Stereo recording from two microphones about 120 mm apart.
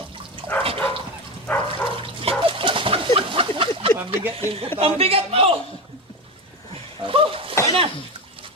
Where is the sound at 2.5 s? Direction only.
45° right (ahead or behind).